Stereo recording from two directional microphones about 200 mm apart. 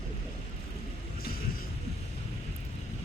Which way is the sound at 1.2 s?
50° left (ahead or behind).